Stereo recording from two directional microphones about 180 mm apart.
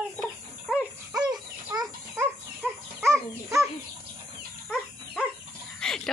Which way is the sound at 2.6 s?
5° left (ahead or behind).